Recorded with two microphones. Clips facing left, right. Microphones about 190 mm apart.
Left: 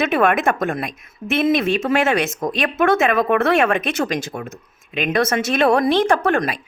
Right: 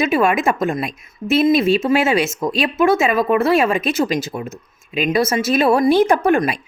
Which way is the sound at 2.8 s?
Centre (ahead or behind).